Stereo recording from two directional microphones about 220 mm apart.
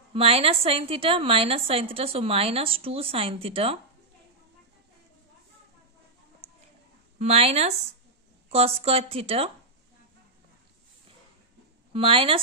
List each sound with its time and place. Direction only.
0.1 s a woman's voice: 25° right (ahead or behind)
7.2 s a woman's voice: 25° right (ahead or behind)
11.9 s a woman's voice: 25° right (ahead or behind)